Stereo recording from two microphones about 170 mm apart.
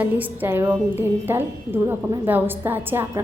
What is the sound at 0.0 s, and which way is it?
A woman's voice, 10° right (ahead or behind).